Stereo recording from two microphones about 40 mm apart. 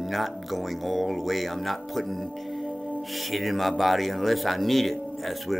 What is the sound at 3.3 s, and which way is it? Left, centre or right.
Speech, centre.